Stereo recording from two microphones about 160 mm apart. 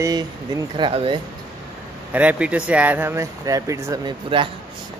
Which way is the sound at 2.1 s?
10° right (ahead or behind).